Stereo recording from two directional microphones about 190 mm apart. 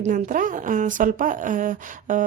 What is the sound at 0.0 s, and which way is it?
A woman's voice, 40° right (ahead or behind).